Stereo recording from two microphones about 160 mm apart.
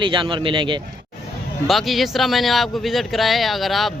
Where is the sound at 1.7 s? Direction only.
Centre (ahead or behind).